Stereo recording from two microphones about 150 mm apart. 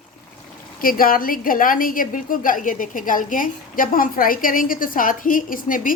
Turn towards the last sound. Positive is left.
turn(degrees=65)  # may be behind; listen again after turning